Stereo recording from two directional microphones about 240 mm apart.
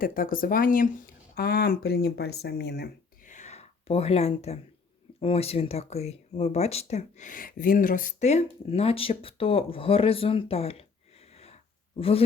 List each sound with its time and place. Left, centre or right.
0.0 s speech: left